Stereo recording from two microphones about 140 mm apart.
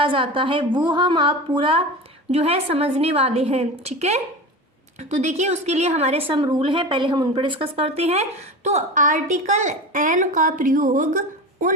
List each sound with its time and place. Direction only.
0.0 s a woman's voice: 40° right (ahead or behind); by 11.7 s 70° right (ahead or behind)